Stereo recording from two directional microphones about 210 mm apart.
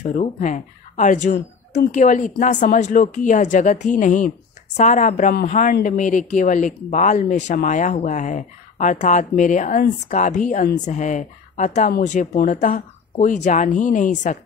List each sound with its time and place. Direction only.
0.0 s a woman's voice: 35° left (ahead or behind)